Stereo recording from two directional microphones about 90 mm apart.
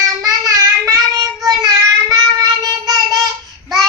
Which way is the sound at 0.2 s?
40° right (ahead or behind).